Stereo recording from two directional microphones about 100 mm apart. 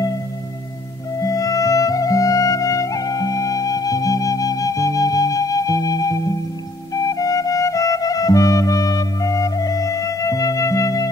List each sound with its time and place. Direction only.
1.2 s music: 35° left (ahead or behind)